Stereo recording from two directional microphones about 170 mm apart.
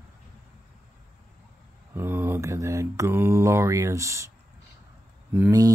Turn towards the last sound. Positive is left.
turn(degrees=-20)  # may be behind; listen again after turning